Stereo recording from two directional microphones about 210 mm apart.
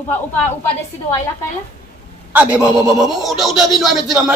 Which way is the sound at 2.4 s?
5° right (ahead or behind).